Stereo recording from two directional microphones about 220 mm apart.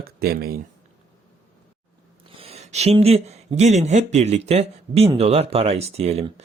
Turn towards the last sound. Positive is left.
turn(degrees=-30)  # may be behind; listen again after turning